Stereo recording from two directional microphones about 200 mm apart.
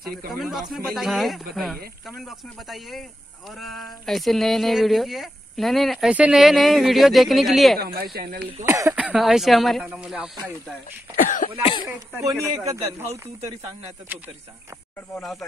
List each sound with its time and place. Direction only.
0.3 s speech: centre (ahead or behind)
7.8 s speech: 50° right (ahead or behind)
8.6 s a man's voice: 15° right (ahead or behind)
8.9 s speech: 5° right (ahead or behind)
11.1 s cough: 40° left (ahead or behind)
11.6 s speech: 25° left (ahead or behind)
12.3 s a man's voice: 15° right (ahead or behind)
15.1 s speech: centre (ahead or behind)